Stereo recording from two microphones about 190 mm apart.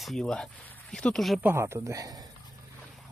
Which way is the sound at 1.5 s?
15° right (ahead or behind).